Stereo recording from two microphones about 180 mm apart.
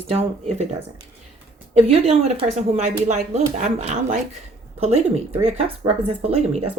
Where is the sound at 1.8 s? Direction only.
35° right (ahead or behind).